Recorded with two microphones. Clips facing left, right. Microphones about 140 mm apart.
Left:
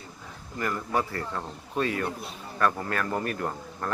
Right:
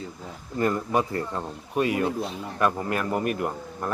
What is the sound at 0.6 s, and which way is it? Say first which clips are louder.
Speech: right 5 dB; 20° right (ahead or behind).